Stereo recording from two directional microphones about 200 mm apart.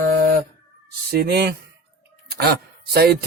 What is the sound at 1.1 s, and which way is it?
Speech, 55° right (ahead or behind).